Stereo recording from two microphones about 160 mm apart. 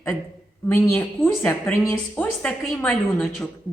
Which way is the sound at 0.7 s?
10° left (ahead or behind).